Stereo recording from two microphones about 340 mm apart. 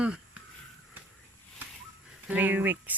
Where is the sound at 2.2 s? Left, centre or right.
Centre.